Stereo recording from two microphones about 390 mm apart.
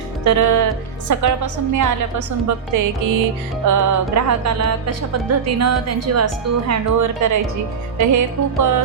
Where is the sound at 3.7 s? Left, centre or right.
Right.